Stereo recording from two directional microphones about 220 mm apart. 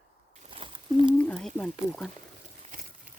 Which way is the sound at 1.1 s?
5° left (ahead or behind).